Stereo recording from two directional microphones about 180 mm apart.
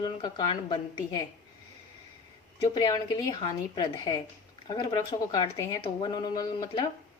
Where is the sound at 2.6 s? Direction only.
20° left (ahead or behind).